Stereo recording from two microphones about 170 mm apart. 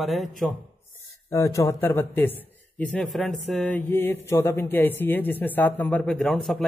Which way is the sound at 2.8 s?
10° left (ahead or behind).